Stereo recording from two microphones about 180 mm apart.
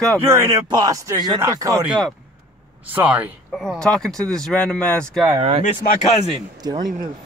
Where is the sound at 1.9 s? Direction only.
Centre (ahead or behind).